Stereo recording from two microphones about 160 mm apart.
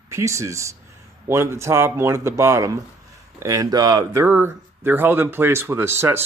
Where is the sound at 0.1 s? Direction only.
20° right (ahead or behind).